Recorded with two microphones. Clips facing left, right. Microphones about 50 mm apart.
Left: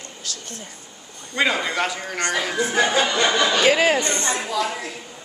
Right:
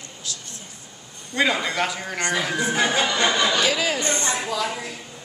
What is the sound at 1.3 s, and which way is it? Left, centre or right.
Speech, centre.